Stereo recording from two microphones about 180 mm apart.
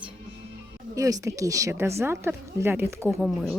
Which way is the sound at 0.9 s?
20° right (ahead or behind).